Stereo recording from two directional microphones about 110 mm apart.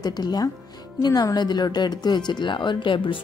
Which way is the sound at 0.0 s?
40° left (ahead or behind).